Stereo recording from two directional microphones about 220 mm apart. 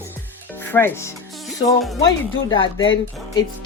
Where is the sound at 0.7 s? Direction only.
10° left (ahead or behind).